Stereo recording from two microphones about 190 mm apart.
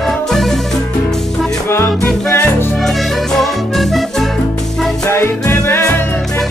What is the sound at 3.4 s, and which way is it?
Music, centre (ahead or behind).